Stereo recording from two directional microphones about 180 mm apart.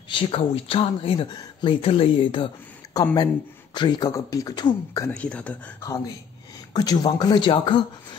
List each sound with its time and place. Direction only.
0.1 s speech: 30° left (ahead or behind)
5.1 s speech: 5° left (ahead or behind)
6.7 s speech: 20° left (ahead or behind)